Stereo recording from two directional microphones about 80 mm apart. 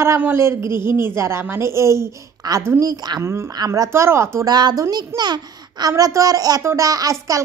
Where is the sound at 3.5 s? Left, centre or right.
Right.